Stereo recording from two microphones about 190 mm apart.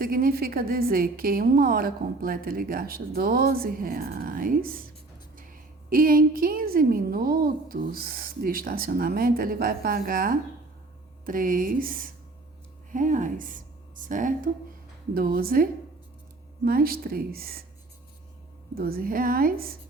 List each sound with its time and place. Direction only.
0.0 s a woman's voice: 50° right (ahead or behind)
18.7 s a woman's voice: 50° right (ahead or behind)